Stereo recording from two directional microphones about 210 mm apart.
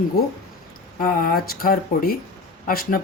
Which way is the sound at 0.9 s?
40° left (ahead or behind).